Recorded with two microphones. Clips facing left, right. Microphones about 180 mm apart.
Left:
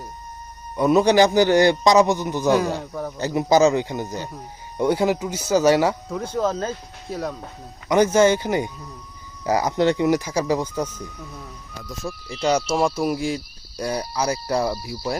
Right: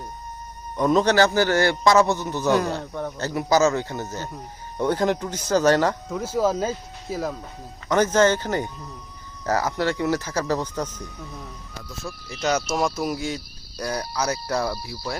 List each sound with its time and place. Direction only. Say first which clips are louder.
0.8 s a man's voice: left 3 dB; 10° left (ahead or behind)
3.2 s a man's voice: left 3 dB; 15° left (ahead or behind)
6.1 s speech: right 1 dB; 5° right (ahead or behind)
7.9 s a man's voice: left 3 dB; 10° left (ahead or behind)
12.4 s a man's voice: left 3 dB; 10° left (ahead or behind)